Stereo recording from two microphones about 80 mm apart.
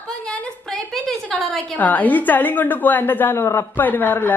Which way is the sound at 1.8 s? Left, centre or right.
Left.